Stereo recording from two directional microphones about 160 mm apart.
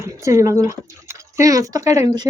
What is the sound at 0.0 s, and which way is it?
Speech, 20° right (ahead or behind).